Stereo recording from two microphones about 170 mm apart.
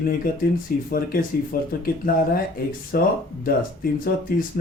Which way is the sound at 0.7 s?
60° left (ahead or behind).